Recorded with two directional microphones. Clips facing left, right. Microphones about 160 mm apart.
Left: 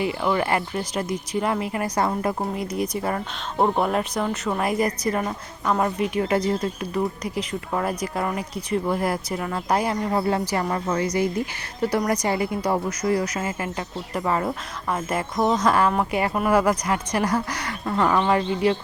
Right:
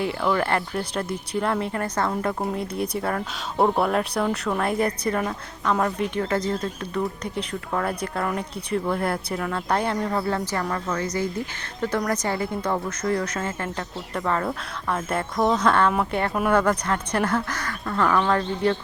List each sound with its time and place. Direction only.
0.0 s speech: 5° left (ahead or behind)
2.4 s speech: centre (ahead or behind)
7.0 s speech: centre (ahead or behind)
10.1 s speech: 20° left (ahead or behind)